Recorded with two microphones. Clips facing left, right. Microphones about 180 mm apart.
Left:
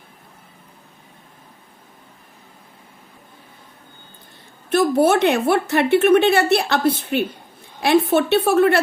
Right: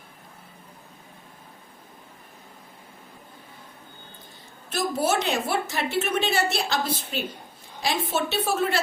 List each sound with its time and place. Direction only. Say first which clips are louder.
4.7 s a woman's voice: left 9 dB; 60° left (ahead or behind)